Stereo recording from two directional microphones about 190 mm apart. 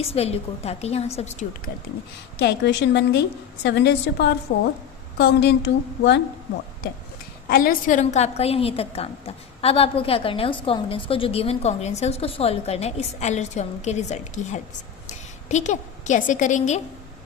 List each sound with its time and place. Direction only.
0.0 s a woman's voice: 30° left (ahead or behind)
2.4 s a woman's voice: 65° left (ahead or behind)
7.4 s a woman's voice: 50° left (ahead or behind)